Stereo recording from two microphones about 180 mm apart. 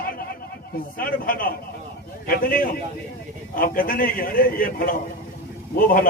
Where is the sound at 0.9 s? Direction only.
55° left (ahead or behind).